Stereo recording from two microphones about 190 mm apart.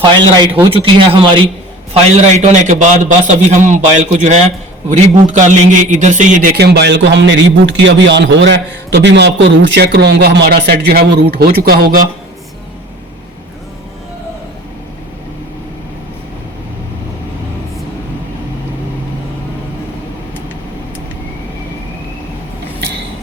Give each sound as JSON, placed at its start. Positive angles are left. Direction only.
{"t": 0.3, "sound": "speech", "side_deg": -25}
{"t": 1.9, "sound": "a man's voice", "side_deg": -35}
{"t": 6.6, "sound": "a man's voice", "side_deg": -60}